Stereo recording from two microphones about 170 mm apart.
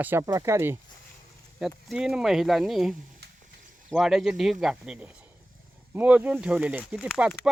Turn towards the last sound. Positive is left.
turn(degrees=-5)  # may be behind; listen again after turning